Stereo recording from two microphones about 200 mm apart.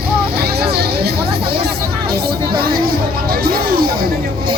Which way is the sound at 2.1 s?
50° right (ahead or behind).